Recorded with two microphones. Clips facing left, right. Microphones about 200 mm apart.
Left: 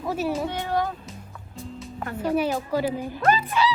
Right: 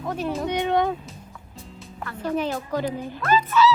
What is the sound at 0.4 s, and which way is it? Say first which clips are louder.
Speech: right 4 dB; 20° right (ahead or behind).